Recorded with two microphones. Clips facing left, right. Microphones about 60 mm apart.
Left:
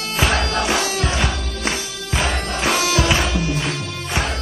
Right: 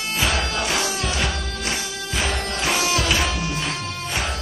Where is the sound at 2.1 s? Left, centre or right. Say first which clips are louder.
Left 3 dB; left.